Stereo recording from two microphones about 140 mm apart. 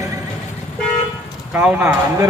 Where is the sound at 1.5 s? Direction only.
10° right (ahead or behind).